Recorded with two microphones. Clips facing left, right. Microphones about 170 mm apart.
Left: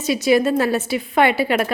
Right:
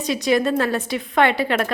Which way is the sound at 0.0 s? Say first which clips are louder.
Left 3 dB; 5° left (ahead or behind).